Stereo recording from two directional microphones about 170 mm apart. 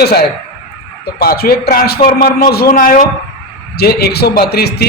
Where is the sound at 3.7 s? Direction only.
70° left (ahead or behind).